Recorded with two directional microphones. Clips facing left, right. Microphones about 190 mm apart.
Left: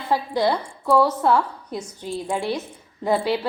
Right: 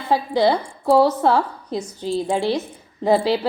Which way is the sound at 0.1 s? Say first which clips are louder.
Right 3 dB; 30° right (ahead or behind).